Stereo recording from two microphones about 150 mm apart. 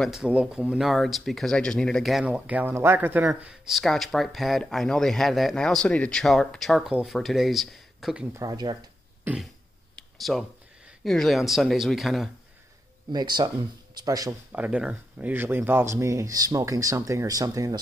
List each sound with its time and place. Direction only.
0.0 s speech: 5° right (ahead or behind)
3.3 s speech: centre (ahead or behind)
8.3 s speech: 25° right (ahead or behind)
9.9 s a sound: centre (ahead or behind)
11.1 s speech: centre (ahead or behind)
13.1 s speech: 30° right (ahead or behind)
14.5 s speech: 10° right (ahead or behind); by 17.7 s 25° right (ahead or behind)